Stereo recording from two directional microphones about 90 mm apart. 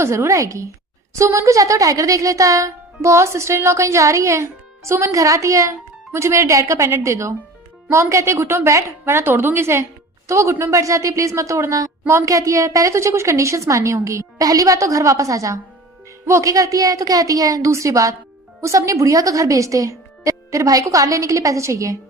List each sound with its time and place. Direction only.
0.0 s a woman's voice: 30° right (ahead or behind)